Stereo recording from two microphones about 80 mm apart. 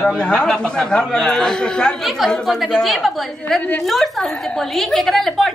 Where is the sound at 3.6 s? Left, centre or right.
Centre.